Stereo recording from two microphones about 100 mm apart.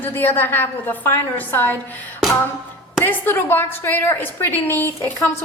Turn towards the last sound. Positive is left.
turn(degrees=20)  # may be behind; listen again after turning